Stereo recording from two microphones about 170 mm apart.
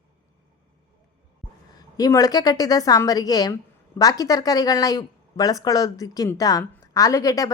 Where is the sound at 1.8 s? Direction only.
20° left (ahead or behind).